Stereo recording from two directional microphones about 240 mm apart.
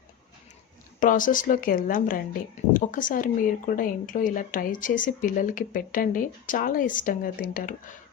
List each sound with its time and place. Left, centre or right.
0.9 s speech: left